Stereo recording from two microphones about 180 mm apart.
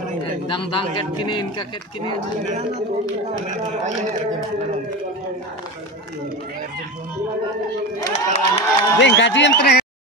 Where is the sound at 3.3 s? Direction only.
40° right (ahead or behind).